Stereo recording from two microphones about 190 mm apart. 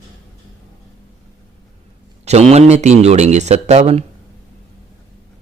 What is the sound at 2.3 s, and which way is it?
Speech, 35° right (ahead or behind).